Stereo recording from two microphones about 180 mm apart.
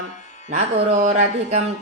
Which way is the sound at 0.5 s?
40° right (ahead or behind).